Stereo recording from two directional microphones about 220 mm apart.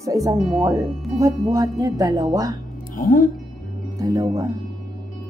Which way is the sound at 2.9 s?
40° left (ahead or behind).